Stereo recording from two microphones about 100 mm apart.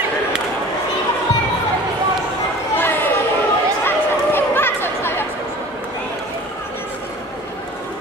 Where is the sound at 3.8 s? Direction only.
20° left (ahead or behind).